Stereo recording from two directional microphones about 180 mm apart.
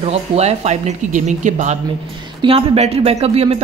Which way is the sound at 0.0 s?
35° right (ahead or behind).